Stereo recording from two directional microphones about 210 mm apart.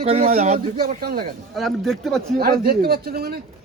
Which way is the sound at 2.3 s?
45° right (ahead or behind).